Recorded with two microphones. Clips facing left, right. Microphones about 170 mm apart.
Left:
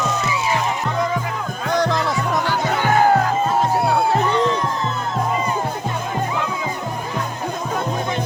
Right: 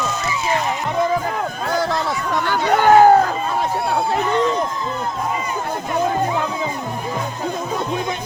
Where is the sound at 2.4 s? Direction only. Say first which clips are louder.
Right 4 dB; 55° right (ahead or behind).